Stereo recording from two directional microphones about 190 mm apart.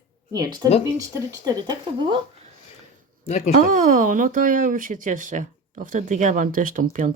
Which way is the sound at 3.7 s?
45° right (ahead or behind).